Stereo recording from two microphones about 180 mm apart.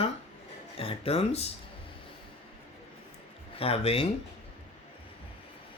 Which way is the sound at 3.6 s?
30° left (ahead or behind).